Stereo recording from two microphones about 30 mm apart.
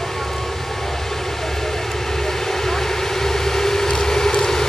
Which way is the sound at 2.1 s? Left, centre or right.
Centre.